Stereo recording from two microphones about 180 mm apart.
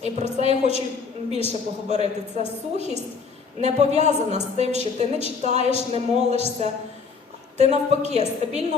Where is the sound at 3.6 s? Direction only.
40° right (ahead or behind).